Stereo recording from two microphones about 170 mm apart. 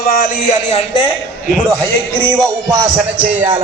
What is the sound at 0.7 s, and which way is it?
Speech, 35° left (ahead or behind).